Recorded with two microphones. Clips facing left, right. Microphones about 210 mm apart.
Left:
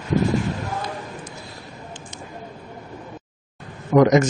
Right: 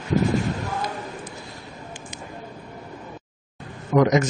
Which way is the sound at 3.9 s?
45° left (ahead or behind).